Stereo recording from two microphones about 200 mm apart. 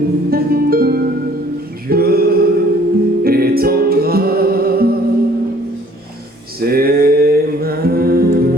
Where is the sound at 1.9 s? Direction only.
50° right (ahead or behind).